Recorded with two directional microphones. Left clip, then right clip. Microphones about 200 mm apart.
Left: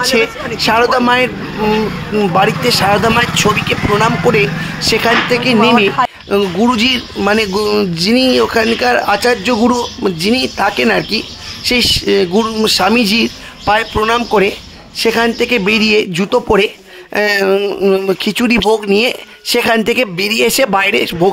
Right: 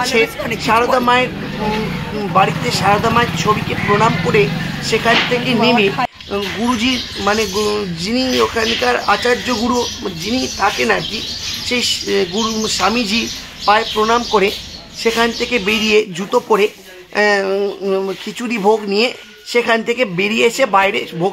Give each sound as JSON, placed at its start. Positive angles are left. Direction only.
{"t": 0.0, "sound": "speech", "side_deg": 40}